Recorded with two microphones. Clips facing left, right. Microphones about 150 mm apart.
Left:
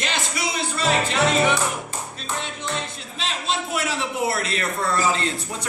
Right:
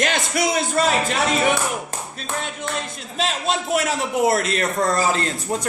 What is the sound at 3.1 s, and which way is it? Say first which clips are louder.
A man's voice: right 5 dB; 45° right (ahead or behind).